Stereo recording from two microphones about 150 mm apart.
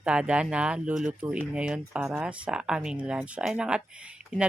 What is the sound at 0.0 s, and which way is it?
Speech, 5° right (ahead or behind).